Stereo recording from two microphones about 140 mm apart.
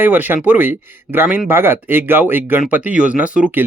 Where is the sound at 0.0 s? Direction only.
15° right (ahead or behind).